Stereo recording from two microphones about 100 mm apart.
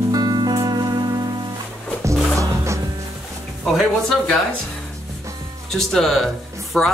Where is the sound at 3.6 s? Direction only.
Centre (ahead or behind).